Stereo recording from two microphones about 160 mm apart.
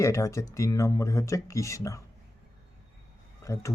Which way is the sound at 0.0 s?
20° left (ahead or behind).